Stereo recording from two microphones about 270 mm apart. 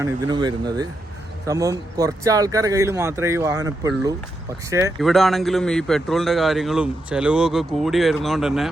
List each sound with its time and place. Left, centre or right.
0.0 s speech: centre
5.0 s a man's voice: centre